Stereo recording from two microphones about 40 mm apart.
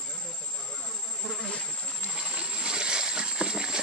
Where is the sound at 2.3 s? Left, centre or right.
Right.